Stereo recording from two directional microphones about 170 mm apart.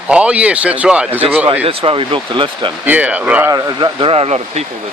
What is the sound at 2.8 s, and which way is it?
Speech, 10° right (ahead or behind).